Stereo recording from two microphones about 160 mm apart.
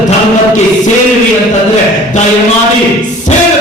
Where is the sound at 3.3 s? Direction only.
45° left (ahead or behind).